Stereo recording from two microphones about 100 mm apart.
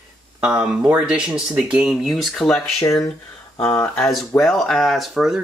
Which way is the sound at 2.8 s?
35° left (ahead or behind).